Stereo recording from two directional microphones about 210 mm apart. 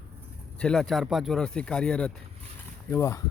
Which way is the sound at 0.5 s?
5° left (ahead or behind).